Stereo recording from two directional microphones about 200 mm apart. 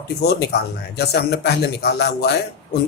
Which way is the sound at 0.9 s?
55° left (ahead or behind).